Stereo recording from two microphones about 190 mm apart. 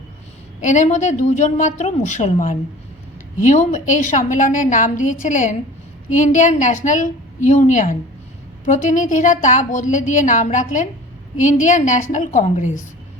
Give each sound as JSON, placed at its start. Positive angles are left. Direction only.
{"t": 0.6, "sound": "a woman's voice", "side_deg": 40}